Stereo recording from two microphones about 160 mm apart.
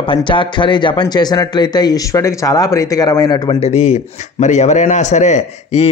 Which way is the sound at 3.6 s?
45° left (ahead or behind).